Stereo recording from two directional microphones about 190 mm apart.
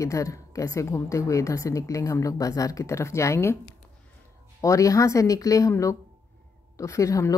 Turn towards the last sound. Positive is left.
turn(degrees=15)  # may be behind; listen again after turning